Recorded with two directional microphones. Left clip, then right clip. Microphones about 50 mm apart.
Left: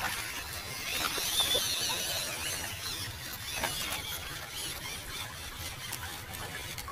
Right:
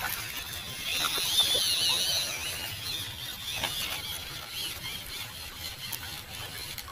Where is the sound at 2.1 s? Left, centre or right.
Centre.